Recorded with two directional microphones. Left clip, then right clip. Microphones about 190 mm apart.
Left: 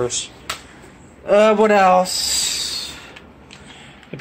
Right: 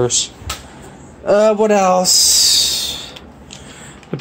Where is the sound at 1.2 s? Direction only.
50° right (ahead or behind).